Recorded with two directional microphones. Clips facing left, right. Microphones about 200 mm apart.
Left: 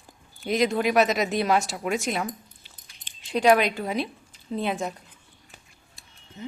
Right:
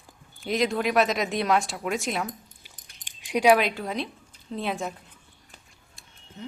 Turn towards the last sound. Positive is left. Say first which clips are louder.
# left 2 dB
turn(degrees=0)  # may be behind; listen again after turning